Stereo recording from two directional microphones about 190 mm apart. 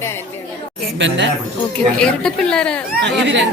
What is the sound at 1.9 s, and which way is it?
Speech, 5° left (ahead or behind).